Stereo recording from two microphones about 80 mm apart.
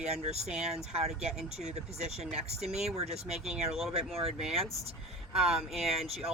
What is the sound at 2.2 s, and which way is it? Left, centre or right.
Speech, centre.